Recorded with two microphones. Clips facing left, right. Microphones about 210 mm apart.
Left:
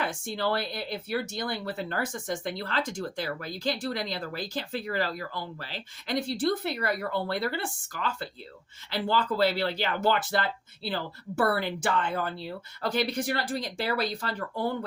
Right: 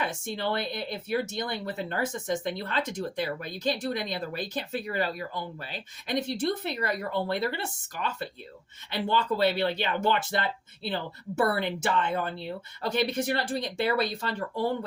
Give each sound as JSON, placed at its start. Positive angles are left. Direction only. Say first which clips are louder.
{"t": 0.0, "sound": "speech", "louder": "left 1 dB", "side_deg": -20}